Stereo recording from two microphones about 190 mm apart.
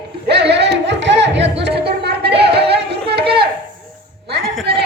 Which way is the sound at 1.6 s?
60° right (ahead or behind).